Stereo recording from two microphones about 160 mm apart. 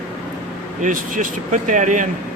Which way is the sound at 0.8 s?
55° right (ahead or behind).